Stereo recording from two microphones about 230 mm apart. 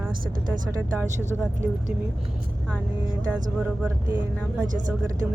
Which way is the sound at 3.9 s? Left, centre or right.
Centre.